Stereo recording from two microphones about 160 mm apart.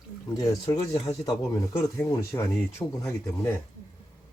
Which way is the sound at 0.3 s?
20° left (ahead or behind).